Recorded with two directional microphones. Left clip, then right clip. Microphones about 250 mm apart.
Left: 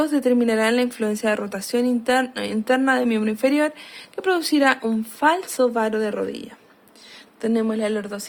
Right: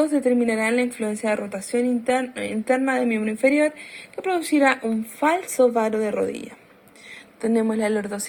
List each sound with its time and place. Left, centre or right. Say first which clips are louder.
0.0 s a woman's voice: left 1 dB; centre
5.6 s a woman's voice: even; centre
7.4 s a woman's voice: even; centre